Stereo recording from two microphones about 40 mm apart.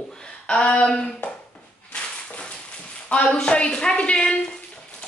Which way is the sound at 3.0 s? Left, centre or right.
Left.